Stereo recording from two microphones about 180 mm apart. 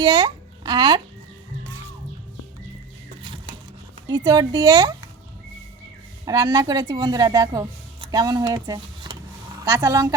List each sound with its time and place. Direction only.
0.0 s a child's voice: 25° right (ahead or behind)
3.2 s a sound: 30° right (ahead or behind)
4.1 s speech: 20° right (ahead or behind)
6.2 s a woman's voice: 20° right (ahead or behind)